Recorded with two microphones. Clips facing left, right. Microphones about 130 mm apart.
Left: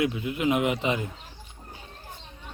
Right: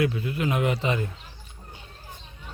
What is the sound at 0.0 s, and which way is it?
Speech, 20° left (ahead or behind).